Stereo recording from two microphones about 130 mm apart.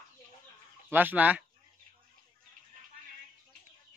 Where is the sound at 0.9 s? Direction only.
15° right (ahead or behind).